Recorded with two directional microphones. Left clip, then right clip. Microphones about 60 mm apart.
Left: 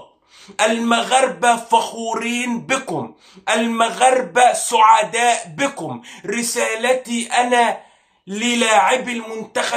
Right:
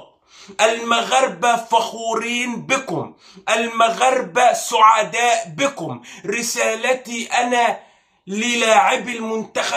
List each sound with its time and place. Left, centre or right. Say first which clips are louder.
0.6 s speech: even; left